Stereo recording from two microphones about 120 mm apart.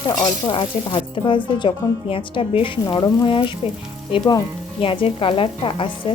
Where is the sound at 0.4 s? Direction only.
45° left (ahead or behind).